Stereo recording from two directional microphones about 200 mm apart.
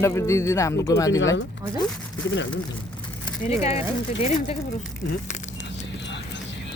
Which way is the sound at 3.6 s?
30° left (ahead or behind).